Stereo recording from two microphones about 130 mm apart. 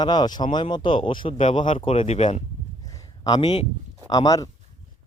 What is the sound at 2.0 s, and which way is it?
Speech, 60° left (ahead or behind).